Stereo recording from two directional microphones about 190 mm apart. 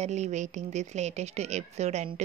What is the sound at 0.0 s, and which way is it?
A woman's voice, 35° right (ahead or behind).